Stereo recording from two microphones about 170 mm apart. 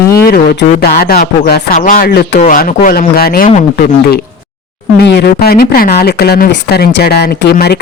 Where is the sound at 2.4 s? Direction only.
50° left (ahead or behind).